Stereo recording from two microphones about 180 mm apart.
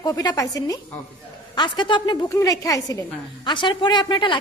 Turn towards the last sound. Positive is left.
turn(degrees=25)  # may be behind; listen again after turning